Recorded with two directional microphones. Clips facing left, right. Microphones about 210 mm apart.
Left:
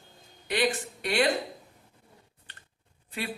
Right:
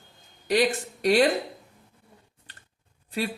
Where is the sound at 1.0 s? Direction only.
35° right (ahead or behind).